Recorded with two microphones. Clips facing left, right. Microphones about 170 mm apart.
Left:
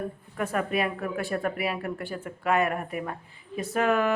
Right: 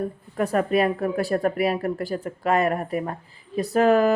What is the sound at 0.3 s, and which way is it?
Speech, 35° right (ahead or behind).